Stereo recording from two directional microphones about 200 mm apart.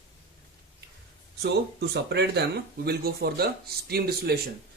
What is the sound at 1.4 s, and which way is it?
Speech, 55° right (ahead or behind).